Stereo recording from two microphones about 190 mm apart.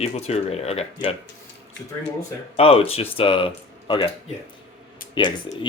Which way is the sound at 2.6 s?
30° left (ahead or behind).